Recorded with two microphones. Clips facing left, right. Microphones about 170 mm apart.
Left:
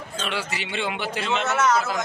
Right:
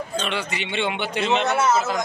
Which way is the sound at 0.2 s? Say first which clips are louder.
Right 2 dB; 5° left (ahead or behind).